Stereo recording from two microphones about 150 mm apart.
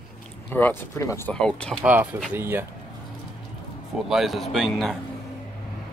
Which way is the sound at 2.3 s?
15° right (ahead or behind).